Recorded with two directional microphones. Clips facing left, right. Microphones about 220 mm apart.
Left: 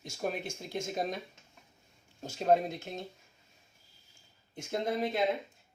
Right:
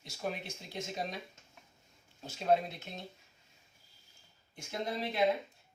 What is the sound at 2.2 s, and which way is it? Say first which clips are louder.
Speech: left 3 dB; 45° left (ahead or behind).